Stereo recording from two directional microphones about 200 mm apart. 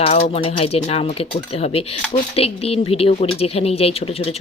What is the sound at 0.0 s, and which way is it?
Speech, 30° left (ahead or behind).